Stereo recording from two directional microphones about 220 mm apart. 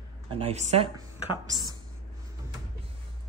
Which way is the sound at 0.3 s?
25° right (ahead or behind).